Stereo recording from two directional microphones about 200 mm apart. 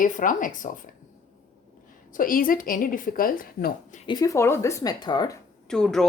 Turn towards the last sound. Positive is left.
turn(degrees=5)  # may be behind; listen again after turning